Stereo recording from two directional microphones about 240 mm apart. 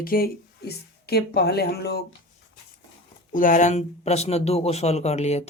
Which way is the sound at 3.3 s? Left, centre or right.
Left.